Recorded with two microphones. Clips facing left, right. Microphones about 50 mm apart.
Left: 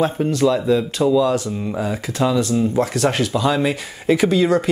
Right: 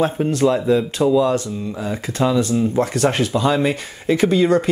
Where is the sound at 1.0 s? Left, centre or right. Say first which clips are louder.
Even; centre.